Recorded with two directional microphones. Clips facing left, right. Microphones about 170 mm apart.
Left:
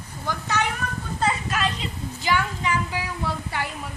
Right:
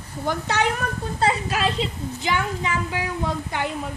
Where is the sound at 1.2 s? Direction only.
30° right (ahead or behind).